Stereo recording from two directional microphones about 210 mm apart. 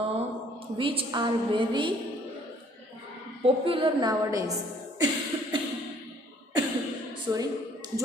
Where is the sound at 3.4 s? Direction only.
25° right (ahead or behind).